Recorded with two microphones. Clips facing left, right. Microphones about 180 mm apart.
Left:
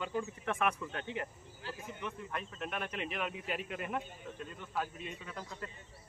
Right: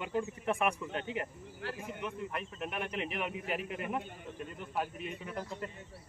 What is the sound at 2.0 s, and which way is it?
Speech, 10° right (ahead or behind).